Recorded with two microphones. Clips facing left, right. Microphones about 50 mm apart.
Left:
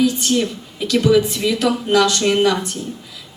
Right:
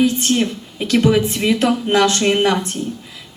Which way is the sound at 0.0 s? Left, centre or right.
Right.